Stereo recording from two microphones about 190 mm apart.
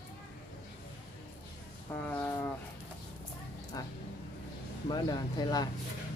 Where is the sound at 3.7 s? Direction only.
20° left (ahead or behind).